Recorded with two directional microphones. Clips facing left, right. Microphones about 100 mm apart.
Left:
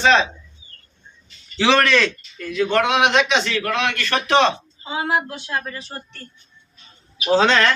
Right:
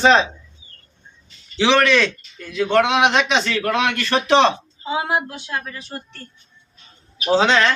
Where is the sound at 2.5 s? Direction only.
25° right (ahead or behind).